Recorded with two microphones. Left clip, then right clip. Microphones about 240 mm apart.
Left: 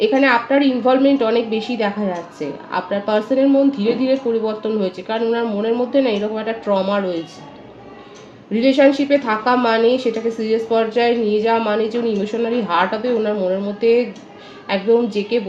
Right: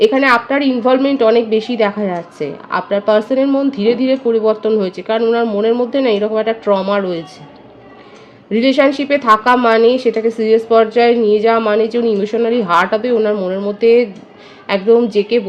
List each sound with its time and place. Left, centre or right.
0.0 s a woman's voice: right
8.5 s a woman's voice: right